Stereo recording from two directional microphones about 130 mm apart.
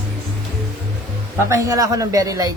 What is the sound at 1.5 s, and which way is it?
Speech, 25° right (ahead or behind).